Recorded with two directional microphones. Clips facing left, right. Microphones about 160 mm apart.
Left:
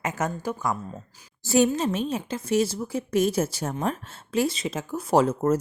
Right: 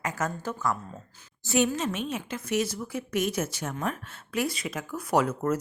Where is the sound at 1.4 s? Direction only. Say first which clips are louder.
Left 4 dB; 35° left (ahead or behind).